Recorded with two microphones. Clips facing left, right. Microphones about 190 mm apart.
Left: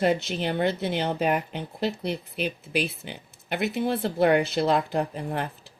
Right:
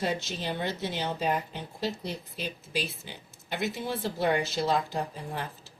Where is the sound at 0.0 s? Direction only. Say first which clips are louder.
Left 7 dB; 60° left (ahead or behind).